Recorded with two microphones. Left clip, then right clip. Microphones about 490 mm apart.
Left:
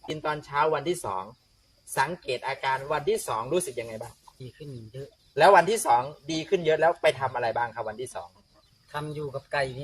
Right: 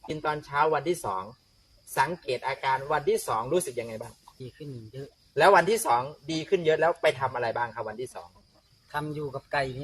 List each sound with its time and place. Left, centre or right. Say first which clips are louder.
0.1 s speech: even; right